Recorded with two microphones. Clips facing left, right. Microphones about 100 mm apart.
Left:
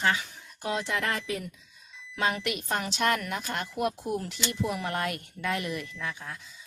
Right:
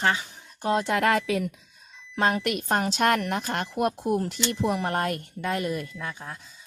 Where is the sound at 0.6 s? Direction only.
45° right (ahead or behind).